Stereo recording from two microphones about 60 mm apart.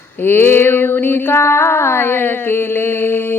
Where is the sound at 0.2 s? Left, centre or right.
Left.